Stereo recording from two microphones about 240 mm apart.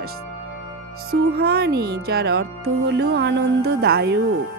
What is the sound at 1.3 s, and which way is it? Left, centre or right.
Speech, right.